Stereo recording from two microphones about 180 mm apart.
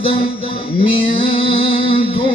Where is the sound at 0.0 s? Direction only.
30° left (ahead or behind).